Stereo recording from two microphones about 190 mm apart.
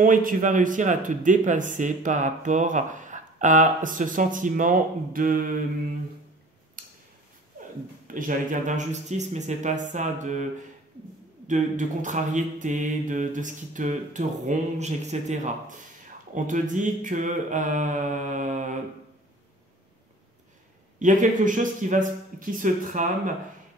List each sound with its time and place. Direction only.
0.0 s speech: 45° right (ahead or behind)
6.8 s a sound: 45° right (ahead or behind)
8.1 s mantra: 45° right (ahead or behind)
11.4 s mantra: 40° right (ahead or behind)
21.0 s speech: 40° right (ahead or behind)